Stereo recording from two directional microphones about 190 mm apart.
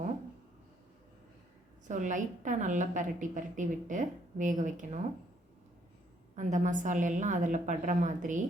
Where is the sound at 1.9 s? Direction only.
40° right (ahead or behind).